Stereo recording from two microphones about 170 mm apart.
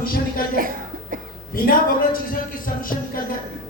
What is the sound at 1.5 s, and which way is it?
A man's voice, 55° left (ahead or behind).